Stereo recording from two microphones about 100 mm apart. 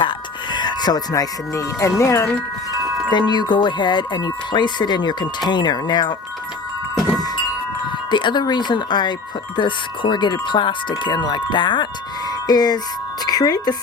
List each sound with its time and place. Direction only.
0.0 s speech: 50° left (ahead or behind); by 2.3 s 25° left (ahead or behind)
3.1 s chime: 45° left (ahead or behind)
8.1 s chime: 50° left (ahead or behind)
12.5 s music: 40° left (ahead or behind)
13.2 s speech: 40° left (ahead or behind)